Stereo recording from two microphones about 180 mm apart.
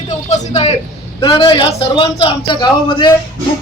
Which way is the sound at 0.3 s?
40° left (ahead or behind).